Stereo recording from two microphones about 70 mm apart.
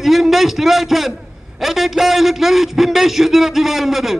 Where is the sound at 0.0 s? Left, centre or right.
Centre.